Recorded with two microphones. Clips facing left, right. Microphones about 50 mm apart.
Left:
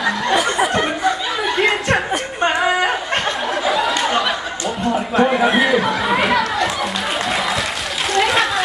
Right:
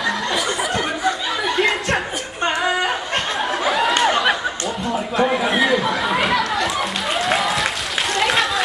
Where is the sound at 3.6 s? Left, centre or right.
Centre.